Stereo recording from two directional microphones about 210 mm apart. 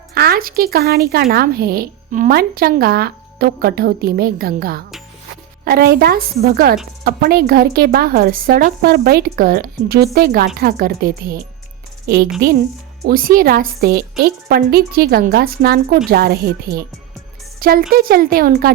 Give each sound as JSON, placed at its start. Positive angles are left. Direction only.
{"t": 0.1, "sound": "speech", "side_deg": -45}